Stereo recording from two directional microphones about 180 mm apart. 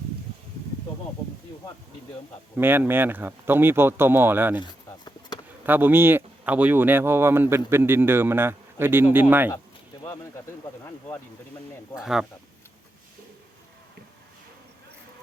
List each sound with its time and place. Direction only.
2.6 s speech: 10° right (ahead or behind)
4.6 s a sound: 25° left (ahead or behind)
5.6 s speech: 10° right (ahead or behind)
10.0 s bird: 15° left (ahead or behind)
11.9 s speech: 5° right (ahead or behind)